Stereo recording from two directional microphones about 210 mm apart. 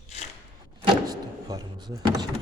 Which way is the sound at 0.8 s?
20° right (ahead or behind).